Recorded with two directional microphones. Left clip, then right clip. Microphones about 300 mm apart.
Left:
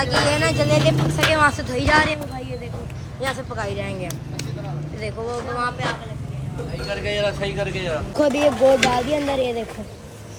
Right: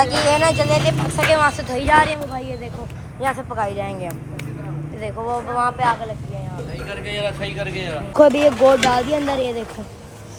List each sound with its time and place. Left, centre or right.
0.0 s speech: centre
5.5 s speech: centre
6.9 s speech: left
8.3 s speech: centre